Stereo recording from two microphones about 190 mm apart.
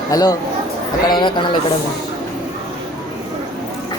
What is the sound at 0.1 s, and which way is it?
Speech, 20° left (ahead or behind).